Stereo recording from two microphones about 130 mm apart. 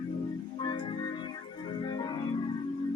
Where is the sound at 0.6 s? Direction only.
40° left (ahead or behind).